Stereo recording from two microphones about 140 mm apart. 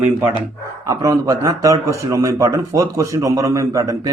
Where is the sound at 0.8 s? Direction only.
25° right (ahead or behind).